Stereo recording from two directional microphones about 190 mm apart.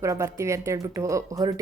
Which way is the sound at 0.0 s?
15° right (ahead or behind).